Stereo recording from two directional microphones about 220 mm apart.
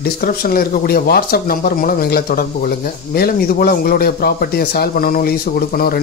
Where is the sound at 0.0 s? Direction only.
45° left (ahead or behind).